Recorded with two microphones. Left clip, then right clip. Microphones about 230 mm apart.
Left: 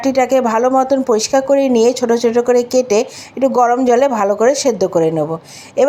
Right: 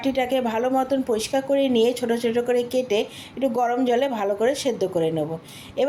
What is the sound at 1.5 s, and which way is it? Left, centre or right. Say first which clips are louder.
Speech: left 6 dB; centre.